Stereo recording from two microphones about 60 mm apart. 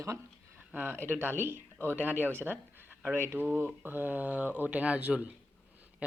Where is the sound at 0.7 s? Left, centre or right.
Right.